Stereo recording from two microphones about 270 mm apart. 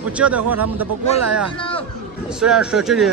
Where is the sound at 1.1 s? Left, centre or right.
Right.